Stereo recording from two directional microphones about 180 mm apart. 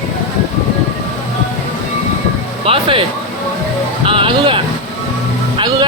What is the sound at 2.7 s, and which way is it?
Speech, 30° right (ahead or behind).